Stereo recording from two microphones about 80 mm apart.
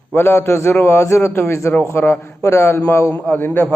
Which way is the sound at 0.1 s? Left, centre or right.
Left.